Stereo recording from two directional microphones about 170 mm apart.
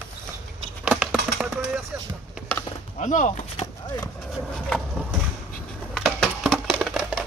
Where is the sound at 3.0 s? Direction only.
45° left (ahead or behind).